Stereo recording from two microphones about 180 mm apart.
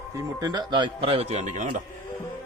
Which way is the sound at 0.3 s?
20° right (ahead or behind).